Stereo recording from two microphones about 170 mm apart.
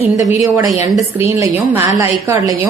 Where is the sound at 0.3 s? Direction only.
20° right (ahead or behind).